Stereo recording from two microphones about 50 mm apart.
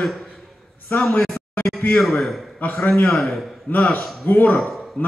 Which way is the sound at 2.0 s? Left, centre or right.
Centre.